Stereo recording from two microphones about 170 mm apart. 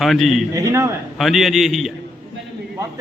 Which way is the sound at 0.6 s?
20° right (ahead or behind).